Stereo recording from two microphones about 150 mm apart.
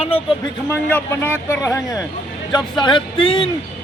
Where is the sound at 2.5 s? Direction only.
30° left (ahead or behind).